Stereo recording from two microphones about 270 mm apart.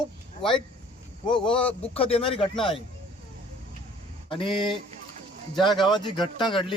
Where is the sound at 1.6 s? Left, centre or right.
Left.